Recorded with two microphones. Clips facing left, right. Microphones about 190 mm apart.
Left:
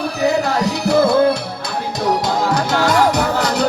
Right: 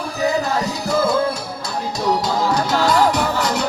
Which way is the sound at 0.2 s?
70° left (ahead or behind).